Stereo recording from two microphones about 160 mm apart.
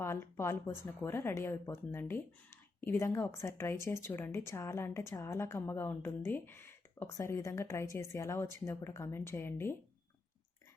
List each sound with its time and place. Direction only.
0.0 s speech: 15° left (ahead or behind)